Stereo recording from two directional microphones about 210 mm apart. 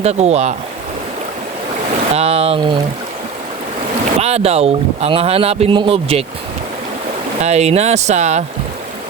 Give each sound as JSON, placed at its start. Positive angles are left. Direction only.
{"t": 0.0, "sound": "speech", "side_deg": -30}
{"t": 2.1, "sound": "speech", "side_deg": -30}
{"t": 4.2, "sound": "speech", "side_deg": -30}
{"t": 7.4, "sound": "speech", "side_deg": -30}